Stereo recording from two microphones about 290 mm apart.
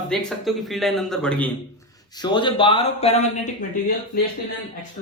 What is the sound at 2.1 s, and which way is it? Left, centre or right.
Speech, centre.